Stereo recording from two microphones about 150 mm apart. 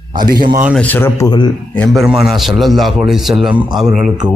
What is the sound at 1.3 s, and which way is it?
Speech, 30° left (ahead or behind).